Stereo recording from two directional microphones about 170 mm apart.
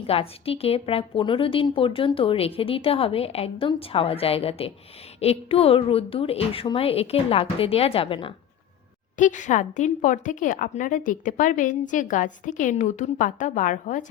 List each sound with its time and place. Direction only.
0.1 s a woman's voice: 35° left (ahead or behind)
9.1 s speech: 45° left (ahead or behind)